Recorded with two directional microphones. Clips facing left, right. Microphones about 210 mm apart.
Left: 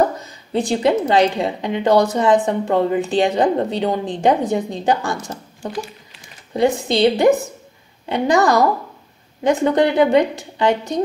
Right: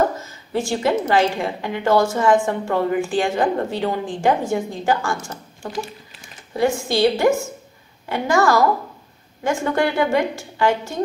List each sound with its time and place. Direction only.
0.2 s a woman's voice: 15° left (ahead or behind)